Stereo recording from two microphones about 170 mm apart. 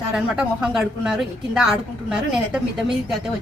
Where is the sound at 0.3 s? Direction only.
5° right (ahead or behind).